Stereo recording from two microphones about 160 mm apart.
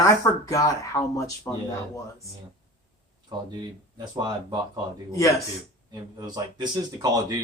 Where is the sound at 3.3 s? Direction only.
25° right (ahead or behind).